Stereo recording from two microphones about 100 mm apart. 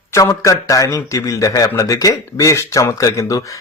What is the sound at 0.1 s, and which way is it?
A man's voice, 30° left (ahead or behind).